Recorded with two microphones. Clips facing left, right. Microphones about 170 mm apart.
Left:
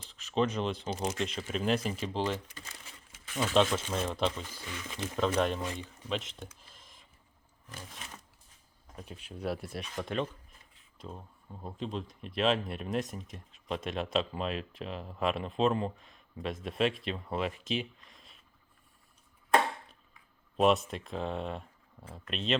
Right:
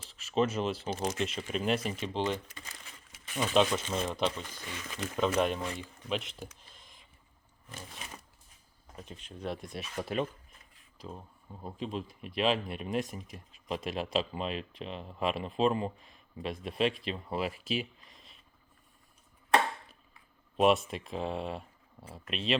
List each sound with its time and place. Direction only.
0.3 s speech: 5° right (ahead or behind)
3.2 s speech: 15° right (ahead or behind)
4.9 s speech: 25° left (ahead or behind)
5.1 s speech: 5° right (ahead or behind)
6.5 s a sound: 5° left (ahead or behind)
7.7 s speech: 5° right (ahead or behind)
9.0 s speech: 5° left (ahead or behind)
20.6 s speech: centre (ahead or behind)